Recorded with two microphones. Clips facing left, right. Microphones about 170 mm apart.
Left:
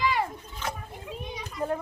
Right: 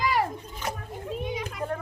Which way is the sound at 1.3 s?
90° right.